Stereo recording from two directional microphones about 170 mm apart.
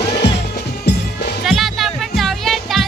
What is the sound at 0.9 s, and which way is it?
Music, 80° left.